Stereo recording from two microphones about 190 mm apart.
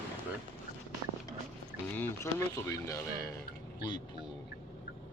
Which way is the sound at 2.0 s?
15° left (ahead or behind).